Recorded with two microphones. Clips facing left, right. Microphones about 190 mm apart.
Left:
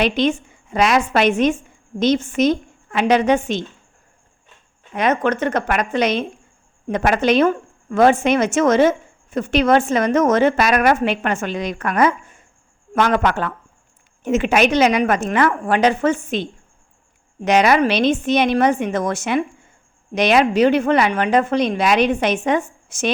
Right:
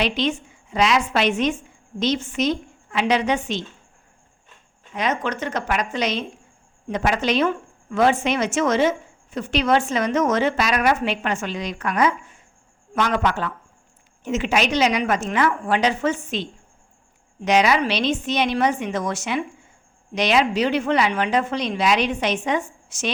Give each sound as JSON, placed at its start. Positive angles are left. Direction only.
{"t": 0.0, "sound": "a woman's voice", "side_deg": 50}
{"t": 4.9, "sound": "a woman's voice", "side_deg": 55}